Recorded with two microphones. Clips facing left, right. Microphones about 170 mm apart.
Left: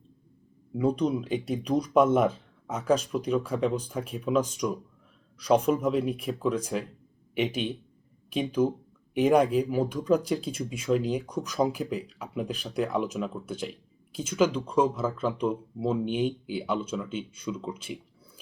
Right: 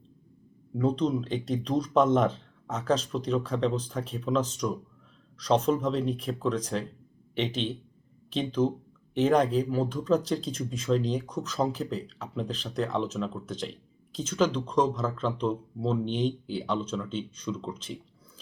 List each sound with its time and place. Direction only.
0.7 s speech: 10° left (ahead or behind)